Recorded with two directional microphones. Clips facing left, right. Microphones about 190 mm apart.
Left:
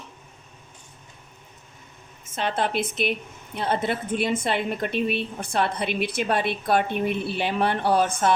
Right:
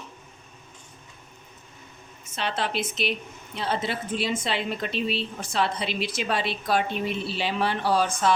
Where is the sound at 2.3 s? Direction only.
50° left (ahead or behind).